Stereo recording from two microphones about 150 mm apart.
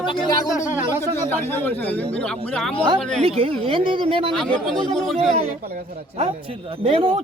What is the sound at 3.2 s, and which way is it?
A woman's voice, 40° right (ahead or behind).